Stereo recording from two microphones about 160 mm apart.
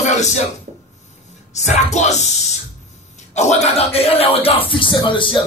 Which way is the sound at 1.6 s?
45° left (ahead or behind).